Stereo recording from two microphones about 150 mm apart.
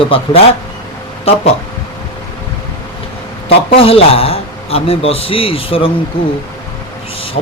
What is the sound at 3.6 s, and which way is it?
A man's voice, 40° left (ahead or behind).